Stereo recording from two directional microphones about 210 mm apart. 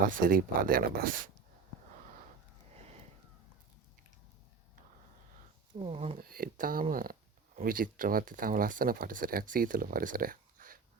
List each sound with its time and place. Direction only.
0.0 s speech: 40° right (ahead or behind)
5.8 s speech: 30° right (ahead or behind)
6.1 s speech: 45° right (ahead or behind)